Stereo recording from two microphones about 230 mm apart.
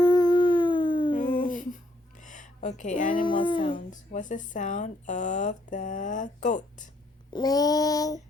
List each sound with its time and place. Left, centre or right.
0.0 s howl: centre
1.1 s a sound: left
3.4 s speech: left
3.9 s speech: left
7.3 s child singing: centre